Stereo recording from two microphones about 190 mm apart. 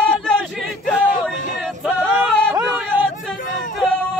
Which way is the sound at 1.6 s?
Centre (ahead or behind).